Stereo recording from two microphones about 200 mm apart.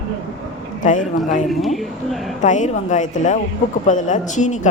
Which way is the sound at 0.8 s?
40° left (ahead or behind).